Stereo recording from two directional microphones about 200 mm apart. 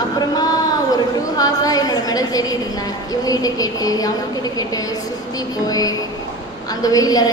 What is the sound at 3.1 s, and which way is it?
A woman's voice, 20° left (ahead or behind).